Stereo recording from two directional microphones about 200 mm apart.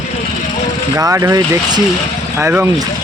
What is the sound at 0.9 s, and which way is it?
Speech, 15° right (ahead or behind).